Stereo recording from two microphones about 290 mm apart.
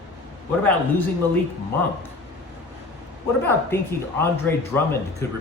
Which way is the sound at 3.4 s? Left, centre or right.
Centre.